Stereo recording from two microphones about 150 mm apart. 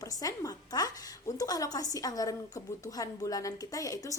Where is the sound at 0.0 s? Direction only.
25° left (ahead or behind).